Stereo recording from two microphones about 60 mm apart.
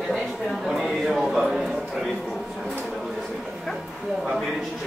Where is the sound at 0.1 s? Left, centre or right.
Centre.